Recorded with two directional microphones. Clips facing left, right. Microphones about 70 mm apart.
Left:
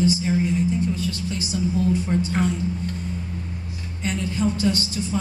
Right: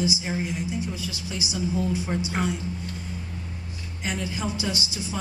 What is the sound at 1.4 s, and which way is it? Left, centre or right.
Speech, centre.